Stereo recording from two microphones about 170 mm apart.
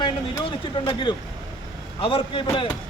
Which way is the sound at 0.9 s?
30° left (ahead or behind).